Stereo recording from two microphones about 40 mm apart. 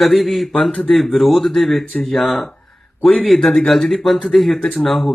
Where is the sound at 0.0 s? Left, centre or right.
Centre.